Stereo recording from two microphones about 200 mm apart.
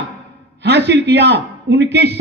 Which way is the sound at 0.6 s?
55° right (ahead or behind).